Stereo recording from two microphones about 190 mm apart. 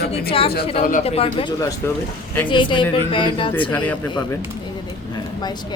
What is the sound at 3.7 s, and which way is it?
Speech, 10° left (ahead or behind).